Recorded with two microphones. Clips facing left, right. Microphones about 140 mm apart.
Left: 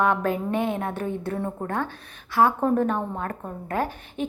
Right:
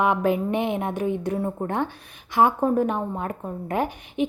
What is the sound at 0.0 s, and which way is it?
A woman's voice, 15° right (ahead or behind).